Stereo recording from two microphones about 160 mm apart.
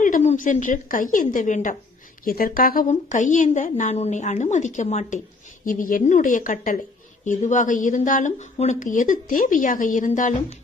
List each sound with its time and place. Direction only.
0.0 s a woman's voice: 50° left (ahead or behind)
2.2 s a woman's voice: 65° left (ahead or behind)